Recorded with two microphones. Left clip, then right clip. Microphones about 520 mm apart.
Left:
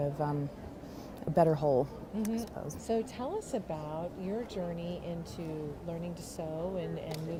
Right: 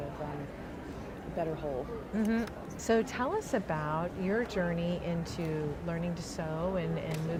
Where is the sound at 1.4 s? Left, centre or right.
Left.